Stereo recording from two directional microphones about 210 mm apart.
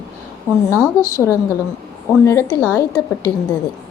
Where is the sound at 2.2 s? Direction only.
10° left (ahead or behind).